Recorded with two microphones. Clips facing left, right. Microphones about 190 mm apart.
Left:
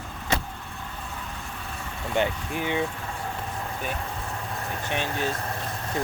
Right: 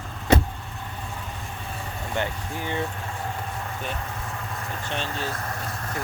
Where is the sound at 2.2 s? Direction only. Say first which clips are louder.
Left 4 dB; 15° left (ahead or behind).